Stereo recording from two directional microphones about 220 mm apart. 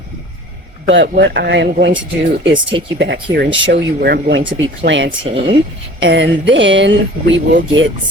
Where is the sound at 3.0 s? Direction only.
50° right (ahead or behind).